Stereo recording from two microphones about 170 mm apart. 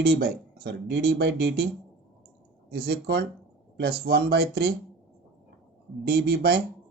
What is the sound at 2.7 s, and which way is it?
Speech, 65° right (ahead or behind).